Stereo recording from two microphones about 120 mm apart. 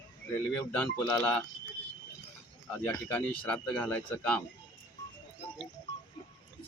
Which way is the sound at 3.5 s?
10° left (ahead or behind).